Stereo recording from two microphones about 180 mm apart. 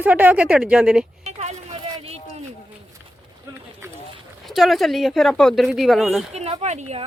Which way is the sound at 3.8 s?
15° right (ahead or behind).